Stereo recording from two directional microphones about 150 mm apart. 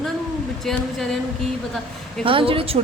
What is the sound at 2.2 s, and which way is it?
Speech, 35° right (ahead or behind).